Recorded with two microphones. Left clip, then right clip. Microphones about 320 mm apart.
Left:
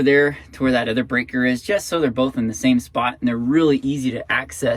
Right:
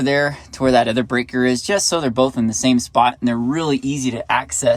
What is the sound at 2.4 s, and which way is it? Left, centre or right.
Speech, centre.